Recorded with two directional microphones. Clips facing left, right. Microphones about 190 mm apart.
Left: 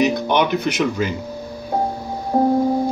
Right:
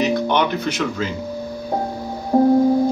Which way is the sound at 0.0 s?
15° left (ahead or behind).